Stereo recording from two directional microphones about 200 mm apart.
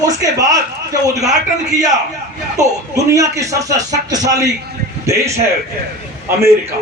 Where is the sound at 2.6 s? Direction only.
15° right (ahead or behind).